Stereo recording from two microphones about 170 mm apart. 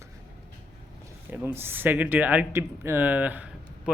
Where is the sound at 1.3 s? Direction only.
15° right (ahead or behind).